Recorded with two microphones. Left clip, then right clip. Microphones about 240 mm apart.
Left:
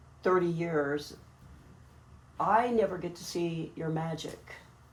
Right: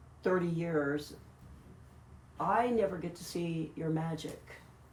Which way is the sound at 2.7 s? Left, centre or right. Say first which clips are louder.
Left 3 dB; left.